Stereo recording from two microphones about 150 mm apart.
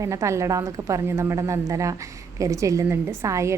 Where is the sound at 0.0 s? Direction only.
20° right (ahead or behind).